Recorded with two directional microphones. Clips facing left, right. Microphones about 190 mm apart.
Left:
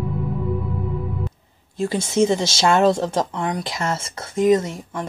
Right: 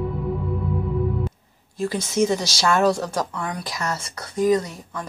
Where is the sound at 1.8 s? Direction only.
25° left (ahead or behind).